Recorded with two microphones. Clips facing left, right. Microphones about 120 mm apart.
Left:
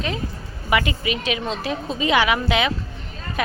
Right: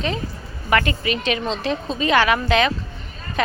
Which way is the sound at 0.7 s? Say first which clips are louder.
Right 2 dB; 10° left (ahead or behind).